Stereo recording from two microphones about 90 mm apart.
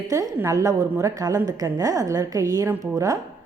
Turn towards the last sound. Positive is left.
turn(degrees=-40)  # may be behind; listen again after turning